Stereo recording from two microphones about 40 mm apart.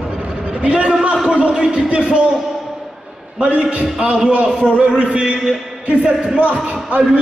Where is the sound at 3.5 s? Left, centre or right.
Right.